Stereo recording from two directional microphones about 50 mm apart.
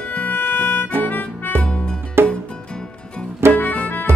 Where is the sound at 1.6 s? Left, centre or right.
Left.